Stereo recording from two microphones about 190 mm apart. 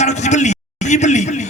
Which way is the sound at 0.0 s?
40° left (ahead or behind).